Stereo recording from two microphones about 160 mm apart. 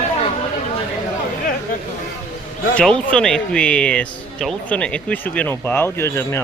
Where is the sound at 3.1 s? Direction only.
5° left (ahead or behind).